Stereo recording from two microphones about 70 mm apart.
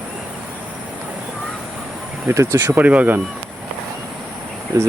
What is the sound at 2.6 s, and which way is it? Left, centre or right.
Speech, right.